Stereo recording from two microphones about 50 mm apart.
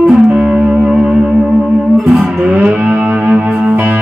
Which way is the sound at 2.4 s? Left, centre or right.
Right.